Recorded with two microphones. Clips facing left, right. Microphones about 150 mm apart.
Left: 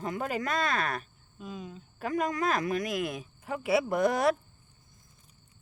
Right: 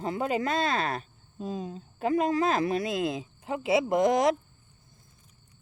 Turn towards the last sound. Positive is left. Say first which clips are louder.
# right 3 dB
turn(degrees=-20)  # may be behind; listen again after turning